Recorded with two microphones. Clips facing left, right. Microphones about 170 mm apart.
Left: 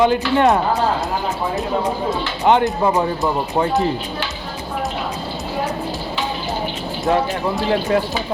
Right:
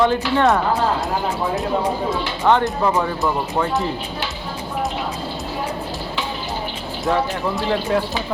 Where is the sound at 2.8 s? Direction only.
20° left (ahead or behind).